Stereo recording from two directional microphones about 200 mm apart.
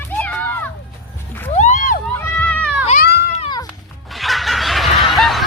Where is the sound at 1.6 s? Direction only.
40° left (ahead or behind).